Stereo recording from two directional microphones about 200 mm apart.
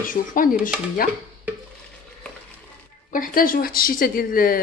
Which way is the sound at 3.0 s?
45° left (ahead or behind).